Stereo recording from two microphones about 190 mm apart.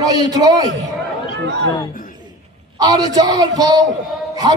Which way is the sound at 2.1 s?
20° right (ahead or behind).